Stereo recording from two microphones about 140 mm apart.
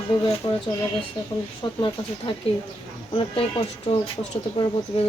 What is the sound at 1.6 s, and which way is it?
Speech, 35° left (ahead or behind).